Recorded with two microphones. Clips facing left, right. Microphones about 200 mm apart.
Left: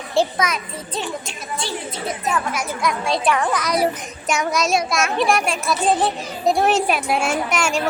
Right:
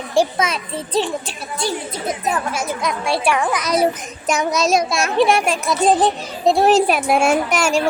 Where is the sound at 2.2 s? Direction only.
30° right (ahead or behind).